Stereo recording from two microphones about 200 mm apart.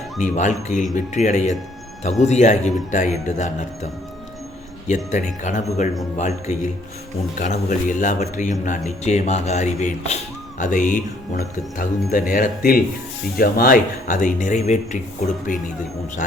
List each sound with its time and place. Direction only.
0.2 s speech: 40° left (ahead or behind)
4.9 s speech: 35° left (ahead or behind)